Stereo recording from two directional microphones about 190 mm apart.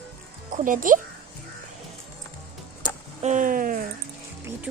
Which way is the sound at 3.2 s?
40° right (ahead or behind).